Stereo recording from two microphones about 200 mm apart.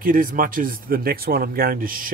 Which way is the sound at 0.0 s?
45° right (ahead or behind).